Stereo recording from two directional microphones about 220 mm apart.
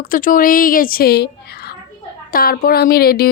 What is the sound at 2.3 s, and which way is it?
Speech, 40° left (ahead or behind).